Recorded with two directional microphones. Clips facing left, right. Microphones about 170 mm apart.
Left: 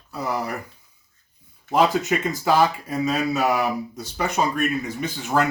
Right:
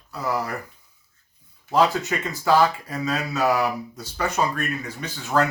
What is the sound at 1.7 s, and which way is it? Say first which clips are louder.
Speech: left 1 dB; 20° left (ahead or behind).